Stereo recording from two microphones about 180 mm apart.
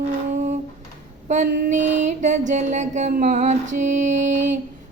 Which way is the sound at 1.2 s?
45° right (ahead or behind).